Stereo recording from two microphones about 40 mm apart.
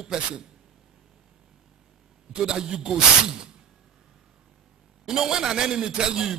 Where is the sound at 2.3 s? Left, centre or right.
Centre.